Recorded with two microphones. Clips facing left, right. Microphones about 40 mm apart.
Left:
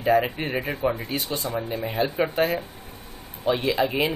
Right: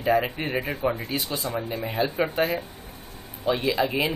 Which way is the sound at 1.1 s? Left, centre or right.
Left.